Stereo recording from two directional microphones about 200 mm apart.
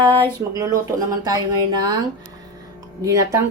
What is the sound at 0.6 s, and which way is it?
Speech, 15° right (ahead or behind).